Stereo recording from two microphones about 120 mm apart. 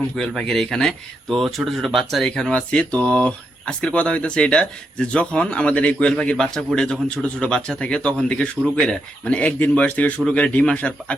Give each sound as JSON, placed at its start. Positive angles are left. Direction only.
{"t": 0.2, "sound": "speech", "side_deg": 5}